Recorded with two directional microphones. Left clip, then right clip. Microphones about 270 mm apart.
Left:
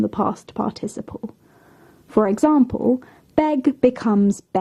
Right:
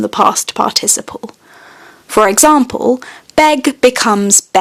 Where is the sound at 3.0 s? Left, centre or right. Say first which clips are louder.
Right 10 dB; centre.